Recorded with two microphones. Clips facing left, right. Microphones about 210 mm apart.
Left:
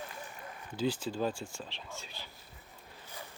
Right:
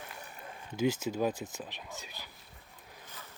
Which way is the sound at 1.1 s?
20° right (ahead or behind).